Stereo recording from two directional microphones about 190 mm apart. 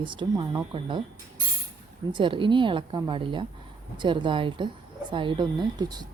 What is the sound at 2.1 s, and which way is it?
Speech, 25° right (ahead or behind).